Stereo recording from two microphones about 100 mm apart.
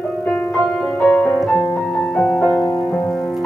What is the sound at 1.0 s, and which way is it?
Music, 15° left (ahead or behind).